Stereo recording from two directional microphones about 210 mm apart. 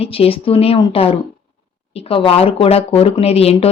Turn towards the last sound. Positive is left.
turn(degrees=30)  # may be behind; listen again after turning